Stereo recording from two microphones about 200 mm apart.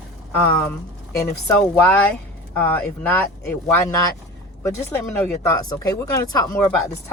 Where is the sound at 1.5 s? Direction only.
10° left (ahead or behind).